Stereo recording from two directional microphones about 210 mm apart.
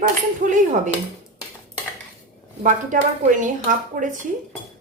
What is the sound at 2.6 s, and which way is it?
A woman's voice, 40° right (ahead or behind).